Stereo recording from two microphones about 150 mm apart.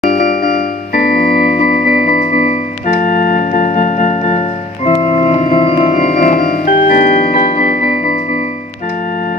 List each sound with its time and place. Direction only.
0.3 s music: 85° left; by 4.4 s 50° left (ahead or behind)
4.8 s music: 30° left (ahead or behind); by 7.9 s 55° left (ahead or behind)